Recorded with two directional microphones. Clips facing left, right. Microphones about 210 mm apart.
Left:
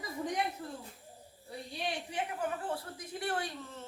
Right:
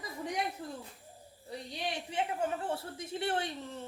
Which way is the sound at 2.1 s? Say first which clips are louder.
Right 5 dB; 25° right (ahead or behind).